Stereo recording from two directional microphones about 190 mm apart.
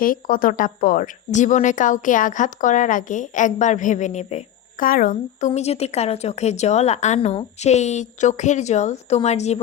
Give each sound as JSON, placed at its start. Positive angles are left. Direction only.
{"t": 0.0, "sound": "a woman's voice", "side_deg": 45}
{"t": 5.5, "sound": "speech", "side_deg": 35}